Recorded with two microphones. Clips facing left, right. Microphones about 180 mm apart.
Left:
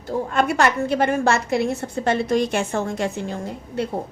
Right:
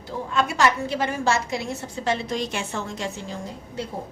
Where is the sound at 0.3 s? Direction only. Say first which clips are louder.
Left 1 dB; 55° left (ahead or behind).